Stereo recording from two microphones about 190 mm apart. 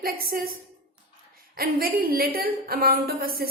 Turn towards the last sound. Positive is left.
turn(degrees=-50)  # may be behind; listen again after turning